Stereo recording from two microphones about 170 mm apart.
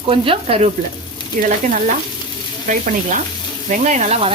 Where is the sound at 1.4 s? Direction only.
50° right (ahead or behind).